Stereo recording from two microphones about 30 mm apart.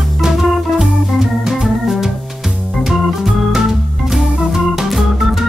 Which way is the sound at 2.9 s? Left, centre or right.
Centre.